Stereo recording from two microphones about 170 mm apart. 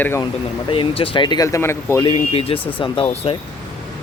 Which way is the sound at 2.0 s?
35° left (ahead or behind).